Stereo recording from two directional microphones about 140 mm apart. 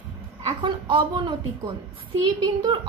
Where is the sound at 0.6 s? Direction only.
35° right (ahead or behind).